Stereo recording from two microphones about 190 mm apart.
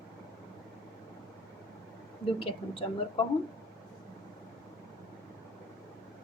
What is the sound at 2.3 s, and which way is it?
Speech, 30° left (ahead or behind).